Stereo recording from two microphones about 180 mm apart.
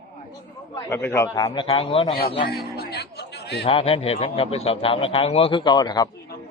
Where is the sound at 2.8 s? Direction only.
60° left (ahead or behind).